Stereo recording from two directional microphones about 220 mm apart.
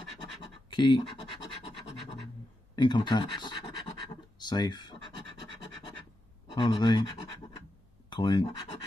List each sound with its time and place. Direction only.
0.7 s speech: 20° left (ahead or behind)
2.7 s scratch: 20° left (ahead or behind)
6.5 s speech: 20° left (ahead or behind)
8.1 s speech: 20° left (ahead or behind)